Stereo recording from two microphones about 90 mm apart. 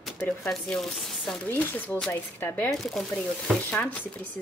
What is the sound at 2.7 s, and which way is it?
A woman's voice, 5° left (ahead or behind).